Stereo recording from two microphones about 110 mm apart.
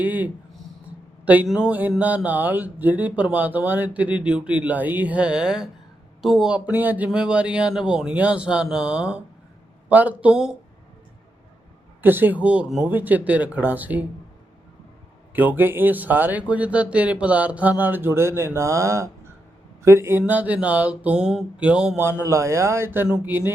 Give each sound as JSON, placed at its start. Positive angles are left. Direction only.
{"t": 0.0, "sound": "speech", "side_deg": -15}
{"t": 12.0, "sound": "speech", "side_deg": -20}
{"t": 15.3, "sound": "speech", "side_deg": -15}
{"t": 22.2, "sound": "speech", "side_deg": -25}